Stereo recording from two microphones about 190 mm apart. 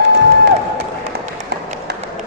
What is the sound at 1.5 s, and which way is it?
Run, 60° right (ahead or behind).